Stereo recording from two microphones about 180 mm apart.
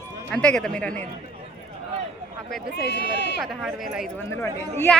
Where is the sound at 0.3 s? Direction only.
5° left (ahead or behind).